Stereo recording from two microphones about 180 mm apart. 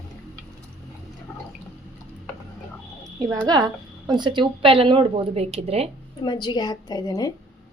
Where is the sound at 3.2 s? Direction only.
20° right (ahead or behind); by 5.9 s 35° right (ahead or behind).